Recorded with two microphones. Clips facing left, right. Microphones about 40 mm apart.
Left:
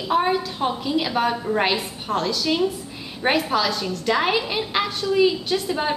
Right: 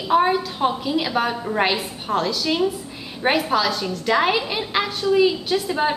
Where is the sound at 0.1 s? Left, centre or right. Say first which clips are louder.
Right 3 dB; centre.